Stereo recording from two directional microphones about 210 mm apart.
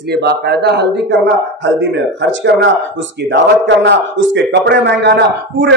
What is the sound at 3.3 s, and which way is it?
A man's voice, 60° right (ahead or behind).